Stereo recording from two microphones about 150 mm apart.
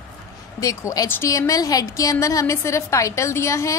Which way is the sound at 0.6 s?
20° left (ahead or behind).